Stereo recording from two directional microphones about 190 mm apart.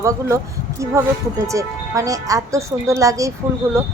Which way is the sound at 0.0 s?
15° right (ahead or behind).